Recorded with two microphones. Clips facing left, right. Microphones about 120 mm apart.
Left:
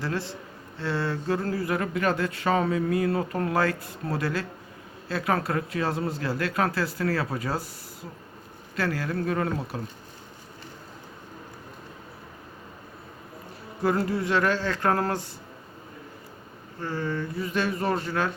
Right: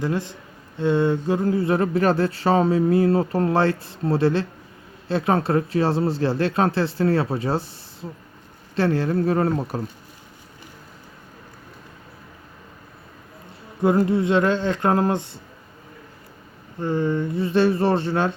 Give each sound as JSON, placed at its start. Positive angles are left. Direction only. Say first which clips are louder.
{"t": 0.0, "sound": "a man's voice", "louder": "right 5 dB", "side_deg": -20}
{"t": 8.7, "sound": "speech", "louder": "right 7 dB", "side_deg": -30}
{"t": 13.8, "sound": "speech", "louder": "right 6 dB", "side_deg": -20}
{"t": 16.8, "sound": "speech", "louder": "right 7 dB", "side_deg": -20}